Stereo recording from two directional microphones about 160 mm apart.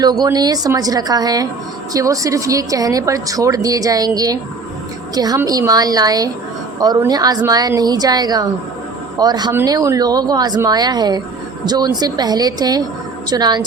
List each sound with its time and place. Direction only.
0.0 s speech: 25° right (ahead or behind)
9.5 s speech: 15° right (ahead or behind)